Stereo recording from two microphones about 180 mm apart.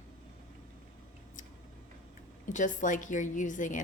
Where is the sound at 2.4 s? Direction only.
45° left (ahead or behind).